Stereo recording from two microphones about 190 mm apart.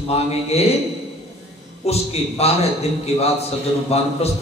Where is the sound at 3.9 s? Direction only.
35° left (ahead or behind).